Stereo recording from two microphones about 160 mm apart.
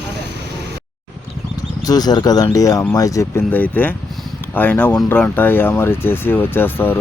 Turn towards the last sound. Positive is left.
turn(degrees=10)  # may be behind; listen again after turning